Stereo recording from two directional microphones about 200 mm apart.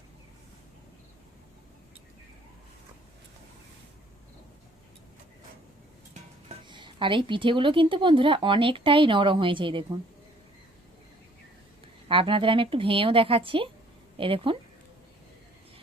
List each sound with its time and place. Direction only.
6.7 s a woman's voice: 25° right (ahead or behind)
12.0 s a woman's voice: 25° right (ahead or behind)